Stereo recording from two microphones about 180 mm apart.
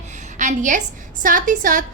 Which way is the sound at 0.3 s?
45° right (ahead or behind).